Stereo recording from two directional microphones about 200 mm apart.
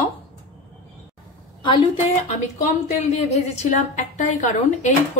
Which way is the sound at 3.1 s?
35° left (ahead or behind).